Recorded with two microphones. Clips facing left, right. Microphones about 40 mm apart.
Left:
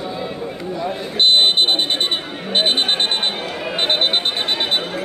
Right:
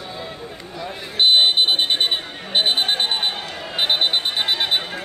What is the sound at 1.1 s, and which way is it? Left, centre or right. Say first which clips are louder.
Buzzer: left 1 dB; centre.